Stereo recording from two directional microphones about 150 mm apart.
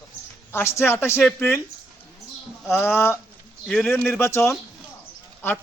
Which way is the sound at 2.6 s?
15° left (ahead or behind).